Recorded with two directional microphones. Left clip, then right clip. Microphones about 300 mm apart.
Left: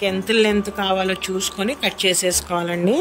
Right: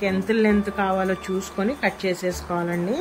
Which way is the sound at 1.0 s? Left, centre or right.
Centre.